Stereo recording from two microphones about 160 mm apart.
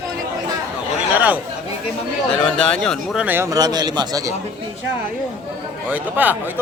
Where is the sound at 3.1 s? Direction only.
10° right (ahead or behind).